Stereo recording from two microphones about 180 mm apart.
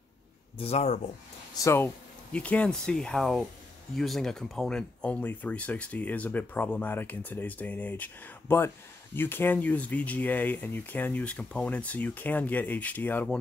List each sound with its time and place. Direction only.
0.6 s speech: 35° left (ahead or behind)
1.6 s speech: 15° left (ahead or behind)